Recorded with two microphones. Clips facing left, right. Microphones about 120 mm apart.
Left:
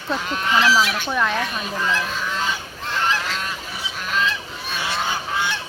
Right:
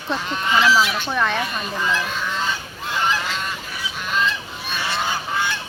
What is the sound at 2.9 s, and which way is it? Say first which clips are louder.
Goose: right 1 dB; centre (ahead or behind).